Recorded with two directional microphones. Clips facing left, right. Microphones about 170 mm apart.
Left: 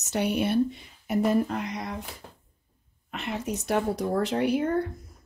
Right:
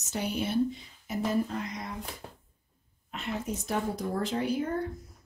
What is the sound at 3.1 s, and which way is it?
A woman's voice, 75° left (ahead or behind).